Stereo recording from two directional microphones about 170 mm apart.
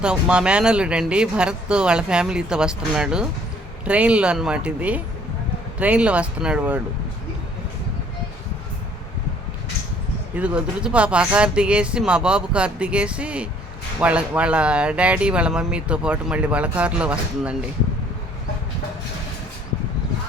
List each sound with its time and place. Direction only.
0.0 s speech: 5° right (ahead or behind)
10.3 s speech: 5° right (ahead or behind)